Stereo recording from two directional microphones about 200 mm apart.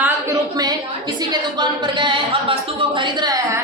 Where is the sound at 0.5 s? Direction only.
20° right (ahead or behind).